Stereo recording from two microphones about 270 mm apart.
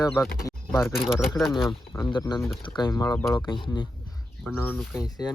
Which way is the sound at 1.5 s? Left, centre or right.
Centre.